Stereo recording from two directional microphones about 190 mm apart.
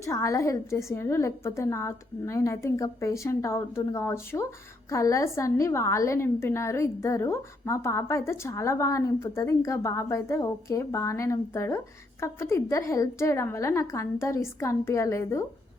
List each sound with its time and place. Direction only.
0.0 s a woman's voice: 15° left (ahead or behind)